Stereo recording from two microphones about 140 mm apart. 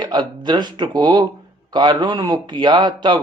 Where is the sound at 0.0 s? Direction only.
30° right (ahead or behind).